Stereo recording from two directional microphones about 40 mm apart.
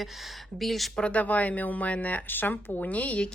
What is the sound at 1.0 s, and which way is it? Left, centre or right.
Speech, left.